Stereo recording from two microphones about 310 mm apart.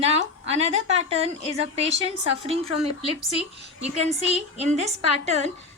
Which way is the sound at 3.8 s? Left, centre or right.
Right.